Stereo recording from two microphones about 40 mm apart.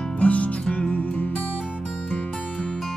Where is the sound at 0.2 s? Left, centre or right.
Left.